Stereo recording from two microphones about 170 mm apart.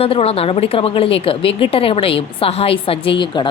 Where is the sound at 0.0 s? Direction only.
35° left (ahead or behind).